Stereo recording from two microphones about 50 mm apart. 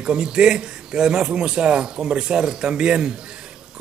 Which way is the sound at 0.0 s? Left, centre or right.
Centre.